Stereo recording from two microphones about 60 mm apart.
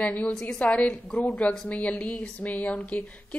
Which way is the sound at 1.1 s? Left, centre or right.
Centre.